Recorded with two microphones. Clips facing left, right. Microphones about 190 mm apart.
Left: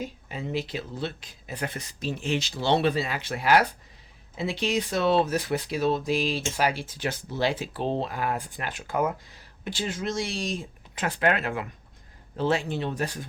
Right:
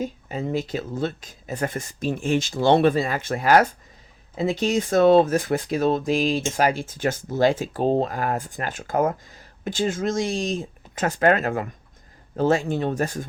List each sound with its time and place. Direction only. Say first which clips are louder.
0.0 s speech: right 6 dB; 45° right (ahead or behind)